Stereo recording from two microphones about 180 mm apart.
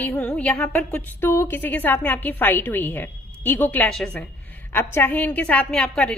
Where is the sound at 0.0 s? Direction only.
10° left (ahead or behind).